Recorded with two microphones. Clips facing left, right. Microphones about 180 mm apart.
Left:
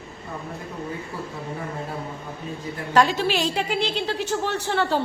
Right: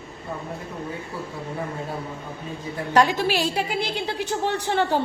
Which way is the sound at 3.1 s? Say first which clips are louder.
Even; 10° right (ahead or behind).